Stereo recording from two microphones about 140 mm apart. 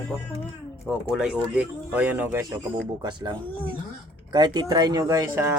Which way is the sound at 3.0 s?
30° right (ahead or behind).